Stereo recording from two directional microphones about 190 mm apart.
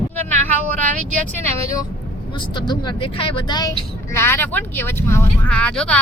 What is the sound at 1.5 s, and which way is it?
Speech, 15° left (ahead or behind).